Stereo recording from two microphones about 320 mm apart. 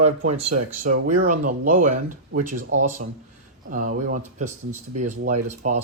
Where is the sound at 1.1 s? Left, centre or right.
Right.